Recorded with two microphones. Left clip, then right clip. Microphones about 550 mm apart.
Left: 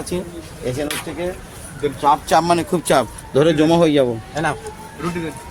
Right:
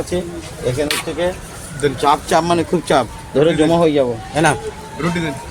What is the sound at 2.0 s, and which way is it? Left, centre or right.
A man's voice, left.